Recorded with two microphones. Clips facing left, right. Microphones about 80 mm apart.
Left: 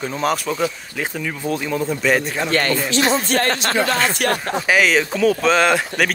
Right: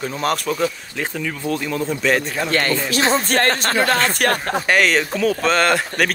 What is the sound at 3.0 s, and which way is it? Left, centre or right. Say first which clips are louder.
Speech: right 1 dB; right.